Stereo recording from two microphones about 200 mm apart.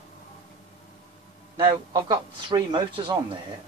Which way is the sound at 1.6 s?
25° right (ahead or behind).